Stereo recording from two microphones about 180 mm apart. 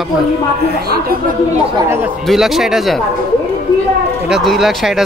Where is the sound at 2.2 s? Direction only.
Centre (ahead or behind).